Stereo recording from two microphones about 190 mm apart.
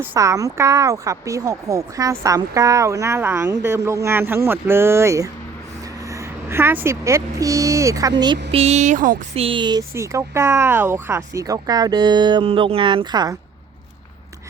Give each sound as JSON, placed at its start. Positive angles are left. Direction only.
{"t": 0.0, "sound": "a woman's voice", "side_deg": -15}
{"t": 8.2, "sound": "a sound", "side_deg": -30}
{"t": 9.3, "sound": "speech", "side_deg": -30}